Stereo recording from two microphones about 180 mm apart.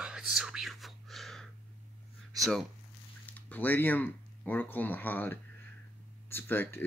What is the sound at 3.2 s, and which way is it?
Speech, 10° left (ahead or behind).